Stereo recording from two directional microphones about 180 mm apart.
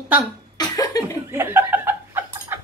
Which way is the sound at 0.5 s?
20° left (ahead or behind).